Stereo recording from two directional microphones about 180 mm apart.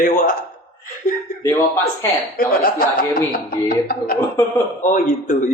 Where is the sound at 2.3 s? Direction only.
55° left (ahead or behind).